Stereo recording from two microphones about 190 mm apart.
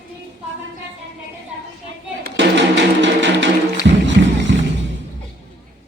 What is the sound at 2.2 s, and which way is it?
Music, 65° right (ahead or behind).